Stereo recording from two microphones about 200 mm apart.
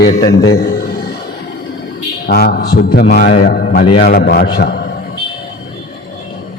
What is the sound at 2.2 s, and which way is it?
A man's voice, 50° left (ahead or behind).